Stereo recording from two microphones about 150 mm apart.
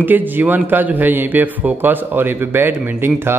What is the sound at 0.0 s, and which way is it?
A man's voice, 10° right (ahead or behind).